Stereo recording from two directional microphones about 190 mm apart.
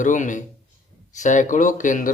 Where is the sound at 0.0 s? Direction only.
40° left (ahead or behind).